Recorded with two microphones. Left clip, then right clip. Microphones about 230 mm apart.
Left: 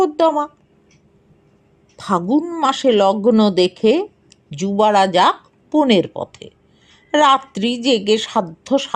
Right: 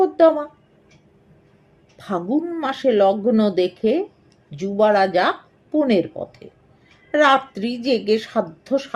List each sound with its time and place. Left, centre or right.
0.0 s speech: left
2.0 s speech: left